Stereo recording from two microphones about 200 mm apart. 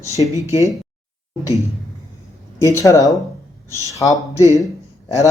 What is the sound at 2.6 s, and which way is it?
Speech, 15° left (ahead or behind).